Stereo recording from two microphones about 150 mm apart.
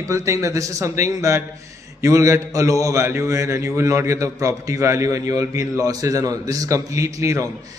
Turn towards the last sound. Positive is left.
turn(degrees=-20)  # may be behind; listen again after turning